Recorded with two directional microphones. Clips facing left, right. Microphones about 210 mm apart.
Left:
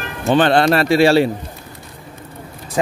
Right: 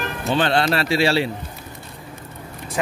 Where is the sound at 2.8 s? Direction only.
30° left (ahead or behind).